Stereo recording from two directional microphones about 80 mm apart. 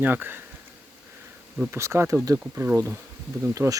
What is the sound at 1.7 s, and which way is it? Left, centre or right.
Speech, right.